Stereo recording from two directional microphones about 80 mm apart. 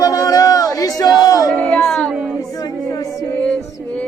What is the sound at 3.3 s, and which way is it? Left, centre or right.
Music, centre.